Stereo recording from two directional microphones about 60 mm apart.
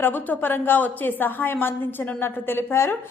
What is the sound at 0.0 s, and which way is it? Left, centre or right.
A woman's voice, left.